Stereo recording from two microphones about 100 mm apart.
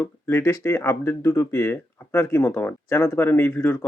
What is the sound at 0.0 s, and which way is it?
Speech, 25° left (ahead or behind).